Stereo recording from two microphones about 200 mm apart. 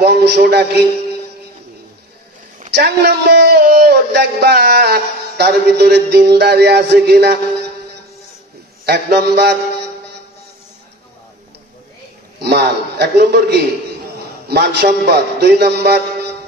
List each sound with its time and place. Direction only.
0.0 s a man's voice: 55° right (ahead or behind)
2.7 s speech: 55° right (ahead or behind)
8.8 s speech: 55° right (ahead or behind)
12.4 s a man's voice: 55° right (ahead or behind)